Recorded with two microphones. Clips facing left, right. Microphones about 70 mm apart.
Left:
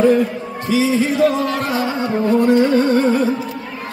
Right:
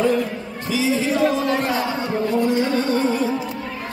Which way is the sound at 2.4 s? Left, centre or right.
Left.